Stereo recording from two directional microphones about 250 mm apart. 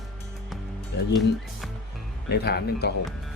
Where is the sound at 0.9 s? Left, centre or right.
Left.